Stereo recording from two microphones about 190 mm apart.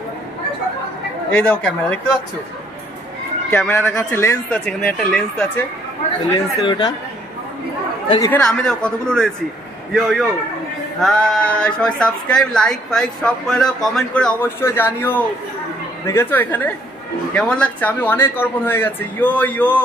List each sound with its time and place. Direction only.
1.5 s speech: 5° left (ahead or behind)
3.4 s speech: 10° left (ahead or behind)
6.3 s speech: 25° left (ahead or behind)
8.3 s speech: 5° left (ahead or behind)